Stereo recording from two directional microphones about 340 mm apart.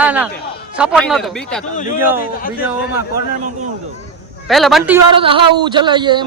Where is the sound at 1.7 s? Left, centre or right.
Left.